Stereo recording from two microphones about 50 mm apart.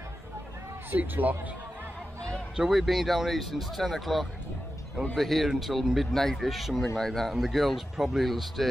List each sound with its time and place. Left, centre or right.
0.9 s speech: right
2.5 s speech: centre